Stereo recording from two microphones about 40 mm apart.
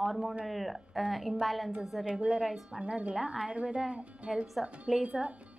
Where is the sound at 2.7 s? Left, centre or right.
Centre.